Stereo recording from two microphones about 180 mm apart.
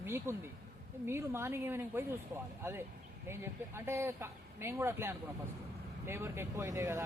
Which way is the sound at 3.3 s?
15° right (ahead or behind).